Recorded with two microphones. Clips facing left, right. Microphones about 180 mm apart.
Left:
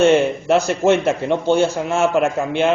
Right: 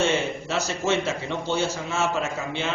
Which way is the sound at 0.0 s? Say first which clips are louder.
Left 10 dB; 60° left (ahead or behind).